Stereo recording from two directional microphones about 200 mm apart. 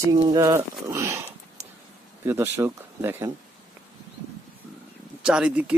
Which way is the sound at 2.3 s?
10° right (ahead or behind).